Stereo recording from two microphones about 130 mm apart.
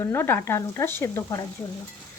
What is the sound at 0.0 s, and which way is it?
Speech, 20° left (ahead or behind).